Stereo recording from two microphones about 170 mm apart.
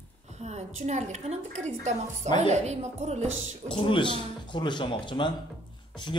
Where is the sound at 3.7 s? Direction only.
30° left (ahead or behind).